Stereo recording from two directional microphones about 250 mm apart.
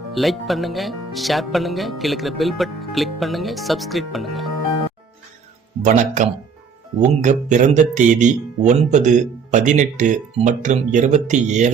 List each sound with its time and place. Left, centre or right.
0.1 s speech: centre
5.8 s speech: right